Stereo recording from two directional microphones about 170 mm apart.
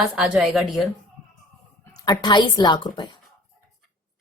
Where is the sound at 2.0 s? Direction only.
25° left (ahead or behind).